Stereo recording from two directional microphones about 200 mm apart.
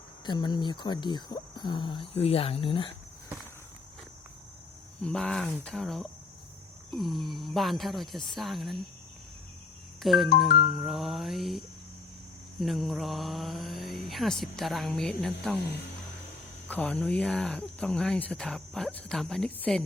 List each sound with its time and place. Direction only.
0.3 s speech: 20° left (ahead or behind)
5.0 s speech: 5° left (ahead or behind)
10.0 s speech: centre (ahead or behind)
10.5 s music: 45° left (ahead or behind)
10.8 s speech: centre (ahead or behind)
16.6 s speech: 5° left (ahead or behind)